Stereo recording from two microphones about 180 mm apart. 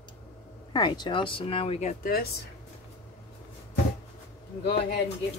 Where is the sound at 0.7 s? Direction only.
25° left (ahead or behind).